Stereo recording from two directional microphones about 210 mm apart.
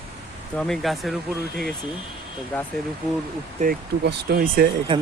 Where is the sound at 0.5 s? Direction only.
5° left (ahead or behind).